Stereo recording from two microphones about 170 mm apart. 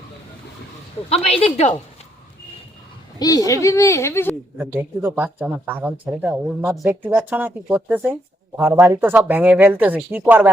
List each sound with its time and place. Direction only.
1.1 s speech: 35° left (ahead or behind)
3.2 s speech: 20° left (ahead or behind)
4.8 s speech: 10° right (ahead or behind)